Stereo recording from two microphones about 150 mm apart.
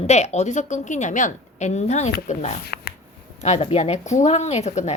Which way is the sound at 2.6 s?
90° left.